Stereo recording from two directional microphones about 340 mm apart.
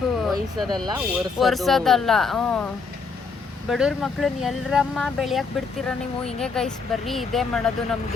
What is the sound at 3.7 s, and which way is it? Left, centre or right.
Speech, centre.